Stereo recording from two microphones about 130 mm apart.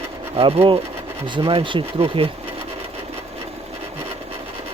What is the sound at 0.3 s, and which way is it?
Speech, 45° right (ahead or behind).